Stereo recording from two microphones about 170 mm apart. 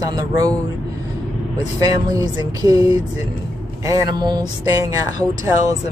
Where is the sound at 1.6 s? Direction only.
20° right (ahead or behind).